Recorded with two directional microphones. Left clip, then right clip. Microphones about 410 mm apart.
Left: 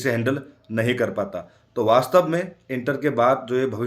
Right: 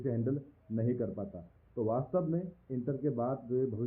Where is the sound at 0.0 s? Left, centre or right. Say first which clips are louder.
Left 13 dB; centre.